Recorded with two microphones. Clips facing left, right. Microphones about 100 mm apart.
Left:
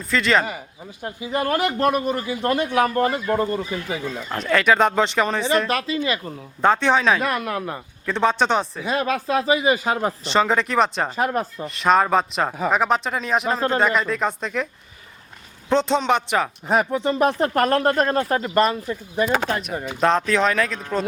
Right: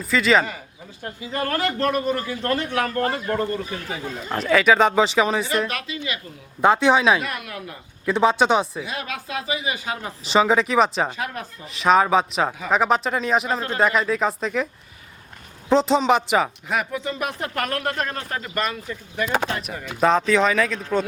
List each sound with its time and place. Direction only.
0.0 s speech: centre (ahead or behind)
1.0 s speech: 20° left (ahead or behind)
4.3 s speech: 5° right (ahead or behind)
5.6 s speech: 35° left (ahead or behind)
6.6 s speech: 5° right (ahead or behind)
7.3 s speech: 40° left (ahead or behind)
8.0 s speech: 5° right (ahead or behind)
8.8 s speech: 40° left (ahead or behind)
10.2 s speech: 5° right (ahead or behind)
11.1 s speech: 40° left (ahead or behind)
11.6 s speech: centre (ahead or behind)
15.7 s speech: centre (ahead or behind)
16.6 s speech: 35° left (ahead or behind)
19.9 s speech: centre (ahead or behind)